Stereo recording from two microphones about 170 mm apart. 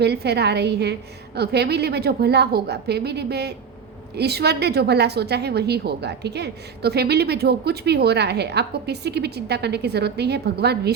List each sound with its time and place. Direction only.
0.0 s a woman's voice: 75° right (ahead or behind)